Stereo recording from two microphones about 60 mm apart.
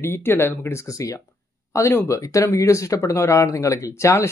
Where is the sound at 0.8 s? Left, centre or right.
Left.